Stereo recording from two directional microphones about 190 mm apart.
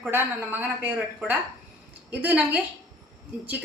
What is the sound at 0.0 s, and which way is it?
A woman's voice, 10° right (ahead or behind).